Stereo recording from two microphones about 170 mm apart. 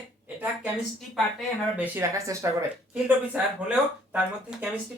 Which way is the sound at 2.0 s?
20° right (ahead or behind).